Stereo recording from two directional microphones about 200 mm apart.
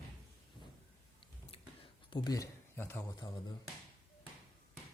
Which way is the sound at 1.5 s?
30° left (ahead or behind).